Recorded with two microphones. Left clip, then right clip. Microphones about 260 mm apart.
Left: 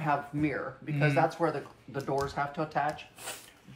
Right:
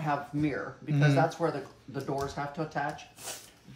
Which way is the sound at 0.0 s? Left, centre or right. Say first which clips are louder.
Left 1 dB; centre.